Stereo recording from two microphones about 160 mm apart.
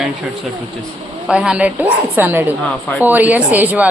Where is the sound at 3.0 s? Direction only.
10° right (ahead or behind).